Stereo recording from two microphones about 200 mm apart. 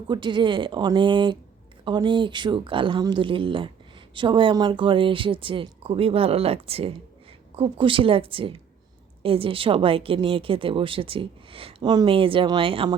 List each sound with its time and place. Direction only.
0.1 s a woman's voice: 25° right (ahead or behind)